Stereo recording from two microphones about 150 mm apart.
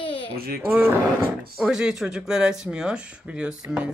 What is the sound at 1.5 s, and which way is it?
Speech, 5° right (ahead or behind).